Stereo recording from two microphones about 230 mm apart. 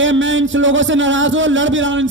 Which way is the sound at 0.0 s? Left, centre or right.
Right.